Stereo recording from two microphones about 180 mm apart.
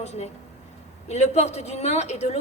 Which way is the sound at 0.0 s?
40° left (ahead or behind).